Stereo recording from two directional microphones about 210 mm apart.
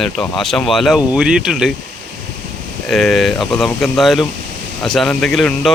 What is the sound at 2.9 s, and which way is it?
Speech, centre (ahead or behind).